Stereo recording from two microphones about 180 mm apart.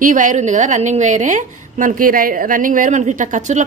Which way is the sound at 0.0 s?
45° right (ahead or behind).